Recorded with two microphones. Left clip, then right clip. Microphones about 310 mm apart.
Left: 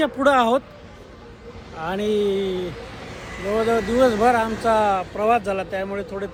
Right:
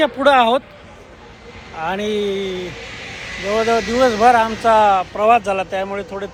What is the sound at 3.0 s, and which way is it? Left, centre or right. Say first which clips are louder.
Vehicle: right 5 dB; left.